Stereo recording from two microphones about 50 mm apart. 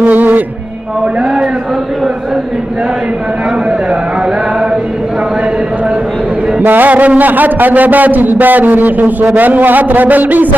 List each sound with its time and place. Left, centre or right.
0.0 s music: right
6.6 s a man's voice: right